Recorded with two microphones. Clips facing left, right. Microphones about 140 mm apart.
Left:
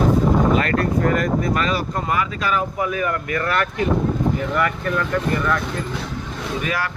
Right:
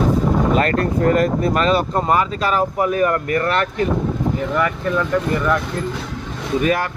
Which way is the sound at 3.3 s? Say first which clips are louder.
Right 3 dB; 30° right (ahead or behind).